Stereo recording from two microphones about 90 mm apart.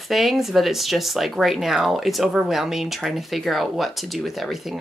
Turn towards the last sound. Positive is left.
turn(degrees=0)  # may be behind; listen again after turning